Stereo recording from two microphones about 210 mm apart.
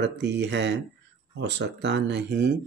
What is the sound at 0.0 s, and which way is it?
Speech, 55° right (ahead or behind).